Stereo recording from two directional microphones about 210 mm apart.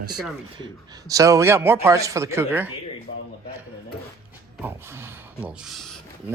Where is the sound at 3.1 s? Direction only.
55° left (ahead or behind).